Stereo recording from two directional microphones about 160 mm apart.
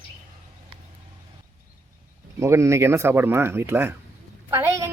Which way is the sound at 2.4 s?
15° right (ahead or behind).